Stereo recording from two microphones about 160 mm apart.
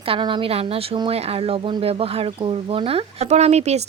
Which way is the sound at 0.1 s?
30° right (ahead or behind).